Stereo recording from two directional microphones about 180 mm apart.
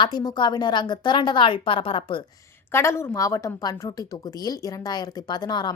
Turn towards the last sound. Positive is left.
turn(degrees=25)  # may be behind; listen again after turning